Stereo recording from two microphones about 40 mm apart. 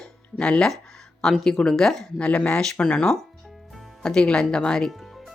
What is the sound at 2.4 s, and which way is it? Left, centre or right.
Speech, left.